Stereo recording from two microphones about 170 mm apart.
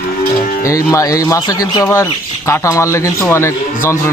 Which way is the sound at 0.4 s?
55° left (ahead or behind).